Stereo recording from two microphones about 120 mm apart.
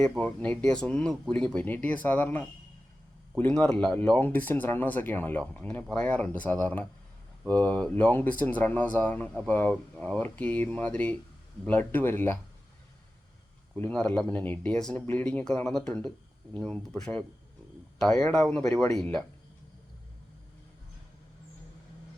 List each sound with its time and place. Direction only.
0.3 s speech: 10° left (ahead or behind)
13.7 s speech: 15° left (ahead or behind)